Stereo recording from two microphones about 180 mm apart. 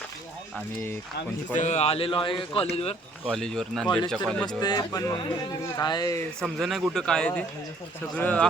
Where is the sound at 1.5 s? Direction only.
40° left (ahead or behind).